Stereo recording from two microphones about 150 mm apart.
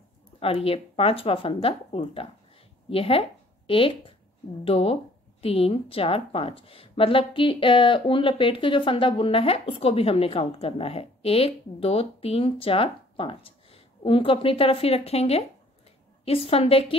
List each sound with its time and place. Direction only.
0.4 s a woman's voice: 40° left (ahead or behind)